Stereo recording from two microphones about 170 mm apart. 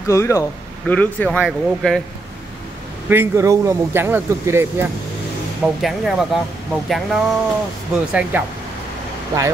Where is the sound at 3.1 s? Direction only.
15° right (ahead or behind).